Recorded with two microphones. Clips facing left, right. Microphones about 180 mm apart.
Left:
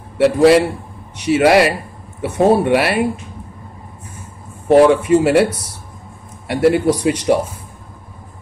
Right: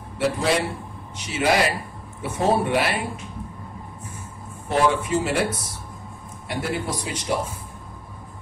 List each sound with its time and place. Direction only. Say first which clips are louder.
0.2 s speech: left 12 dB; 70° left (ahead or behind)
4.6 s speech: left 11 dB; 65° left (ahead or behind)